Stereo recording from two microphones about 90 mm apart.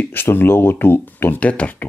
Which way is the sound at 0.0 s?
25° left (ahead or behind).